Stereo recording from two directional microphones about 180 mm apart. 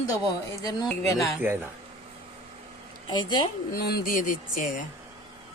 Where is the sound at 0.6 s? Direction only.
20° left (ahead or behind).